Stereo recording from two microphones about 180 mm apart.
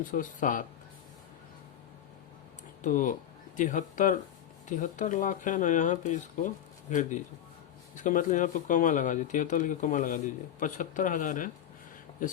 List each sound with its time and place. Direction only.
0.1 s speech: 45° left (ahead or behind)
2.8 s speech: 45° left (ahead or behind)